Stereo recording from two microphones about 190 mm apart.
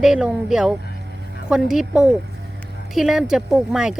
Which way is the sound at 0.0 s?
5° right (ahead or behind).